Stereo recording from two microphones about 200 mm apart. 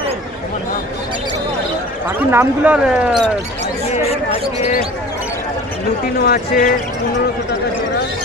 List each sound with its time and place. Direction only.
2.3 s speech: 5° right (ahead or behind)
6.2 s speech: 45° left (ahead or behind)